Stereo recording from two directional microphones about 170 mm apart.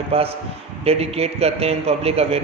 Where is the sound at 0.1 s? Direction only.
35° right (ahead or behind).